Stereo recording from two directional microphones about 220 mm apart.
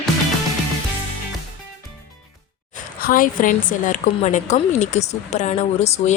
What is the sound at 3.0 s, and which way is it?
A woman's voice, 40° left (ahead or behind).